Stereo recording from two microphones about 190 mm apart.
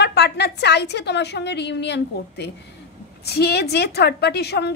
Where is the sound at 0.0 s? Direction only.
60° left (ahead or behind).